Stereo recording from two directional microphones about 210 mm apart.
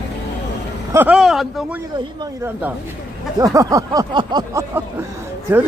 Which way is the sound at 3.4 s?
15° right (ahead or behind).